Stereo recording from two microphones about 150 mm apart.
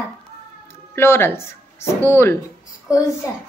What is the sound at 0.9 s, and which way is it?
A woman's voice, 15° left (ahead or behind).